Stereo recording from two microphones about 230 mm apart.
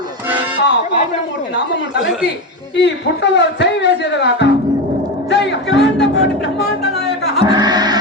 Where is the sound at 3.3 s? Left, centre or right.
Left.